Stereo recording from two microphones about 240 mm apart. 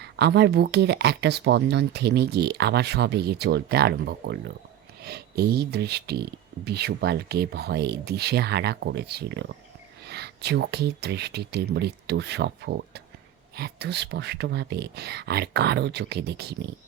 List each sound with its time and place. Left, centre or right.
0.0 s speech: right